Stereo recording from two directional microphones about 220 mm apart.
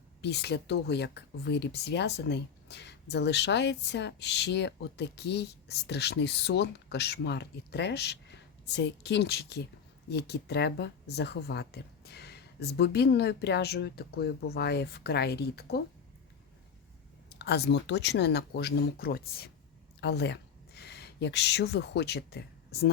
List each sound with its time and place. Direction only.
0.2 s speech: 50° left (ahead or behind)
17.2 s speech: 50° left (ahead or behind)